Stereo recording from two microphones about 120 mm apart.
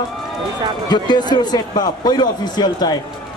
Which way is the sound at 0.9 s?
35° left (ahead or behind).